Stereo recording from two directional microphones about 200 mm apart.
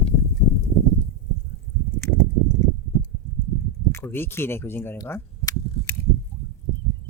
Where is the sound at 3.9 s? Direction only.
10° left (ahead or behind).